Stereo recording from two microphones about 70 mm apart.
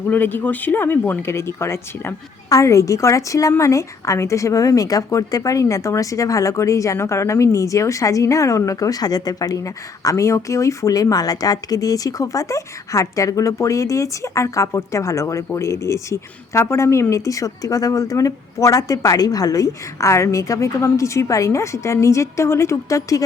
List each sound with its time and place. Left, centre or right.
0.1 s speech: left
10.0 s speech: left